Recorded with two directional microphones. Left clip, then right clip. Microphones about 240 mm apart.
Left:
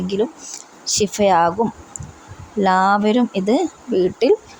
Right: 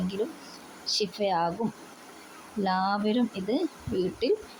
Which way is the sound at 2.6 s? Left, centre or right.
Left.